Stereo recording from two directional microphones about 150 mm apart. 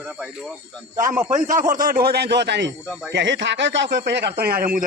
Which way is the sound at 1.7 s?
70° right (ahead or behind).